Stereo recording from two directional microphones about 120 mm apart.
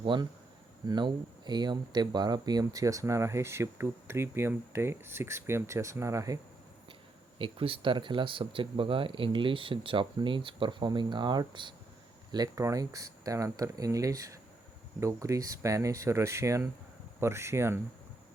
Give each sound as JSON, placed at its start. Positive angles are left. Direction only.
{"t": 0.0, "sound": "speech", "side_deg": -40}
{"t": 7.3, "sound": "speech", "side_deg": -45}